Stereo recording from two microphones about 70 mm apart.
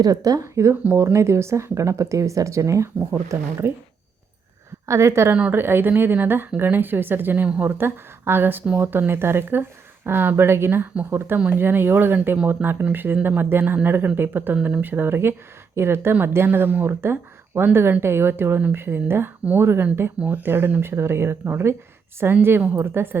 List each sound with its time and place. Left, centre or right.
0.0 s speech: right
4.9 s speech: right
7.4 s speech: centre
7.8 s speech: right